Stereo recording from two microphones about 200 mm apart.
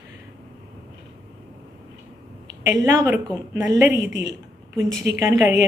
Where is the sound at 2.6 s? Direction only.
15° right (ahead or behind).